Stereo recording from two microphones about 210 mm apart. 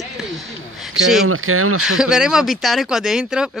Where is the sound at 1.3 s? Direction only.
85° right.